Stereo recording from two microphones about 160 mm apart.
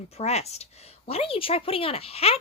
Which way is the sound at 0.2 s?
40° left (ahead or behind).